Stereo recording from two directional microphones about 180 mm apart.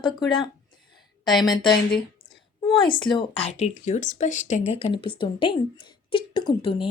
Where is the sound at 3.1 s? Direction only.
30° left (ahead or behind).